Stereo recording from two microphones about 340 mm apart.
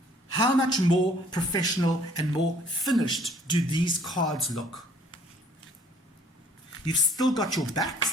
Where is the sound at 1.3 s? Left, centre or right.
Centre.